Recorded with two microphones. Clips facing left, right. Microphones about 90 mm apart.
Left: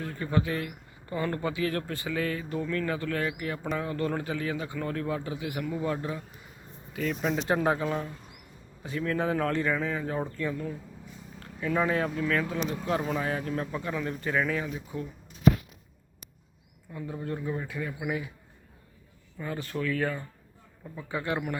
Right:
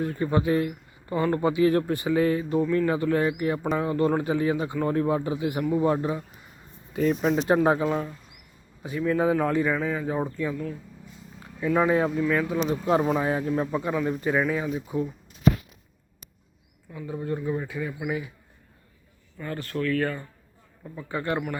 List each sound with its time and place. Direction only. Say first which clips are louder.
0.0 s speech: right 5 dB; 20° right (ahead or behind)
7.2 s a man's voice: right 5 dB; 10° right (ahead or behind)
7.4 s a man's voice: right 5 dB; 25° right (ahead or behind); by 10.6 s 5° right (ahead or behind)
11.3 s a sound: right 5 dB; 10° right (ahead or behind)
11.9 s a man's voice: right 5 dB; 20° right (ahead or behind)
12.6 s a man's voice: right 7 dB; 25° right (ahead or behind)
16.9 s speech: right 4 dB; centre (ahead or behind)
19.4 s speech: right 3 dB; 10° left (ahead or behind)